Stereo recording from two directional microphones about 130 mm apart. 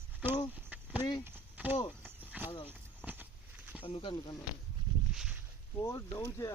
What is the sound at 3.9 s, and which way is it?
Speech, 40° left (ahead or behind).